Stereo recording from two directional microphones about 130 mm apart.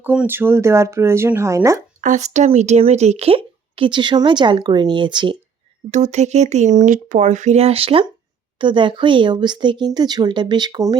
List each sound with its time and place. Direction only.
0.0 s speech: 15° right (ahead or behind)
2.0 s speech: 70° right (ahead or behind); by 5.4 s 35° right (ahead or behind)
5.9 s speech: 65° right (ahead or behind)
8.5 s speech: 40° right (ahead or behind)